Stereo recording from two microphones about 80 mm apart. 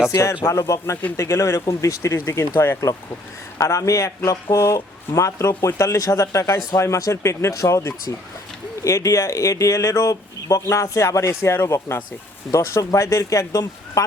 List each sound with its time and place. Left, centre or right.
0.1 s speech: left